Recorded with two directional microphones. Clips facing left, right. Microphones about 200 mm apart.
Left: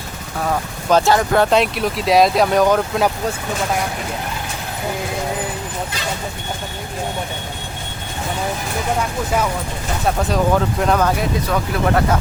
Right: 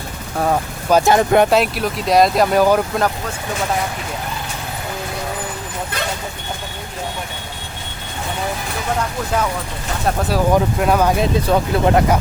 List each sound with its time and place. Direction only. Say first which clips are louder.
0.9 s speech: right 1 dB; 15° right (ahead or behind)
1.5 s speech: even; centre (ahead or behind)
9.0 s speech: right 1 dB; 5° left (ahead or behind)
10.1 s speech: right 1 dB; 5° right (ahead or behind)
11.2 s speech: right 4 dB; 25° right (ahead or behind)